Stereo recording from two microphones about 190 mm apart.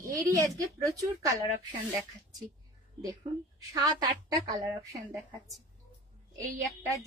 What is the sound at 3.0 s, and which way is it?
A woman's voice, 20° right (ahead or behind).